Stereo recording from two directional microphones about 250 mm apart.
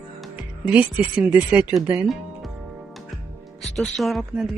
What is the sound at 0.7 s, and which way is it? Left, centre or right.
Speech, centre.